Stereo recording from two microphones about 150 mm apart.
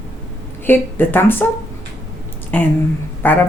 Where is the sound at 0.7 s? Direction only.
15° left (ahead or behind).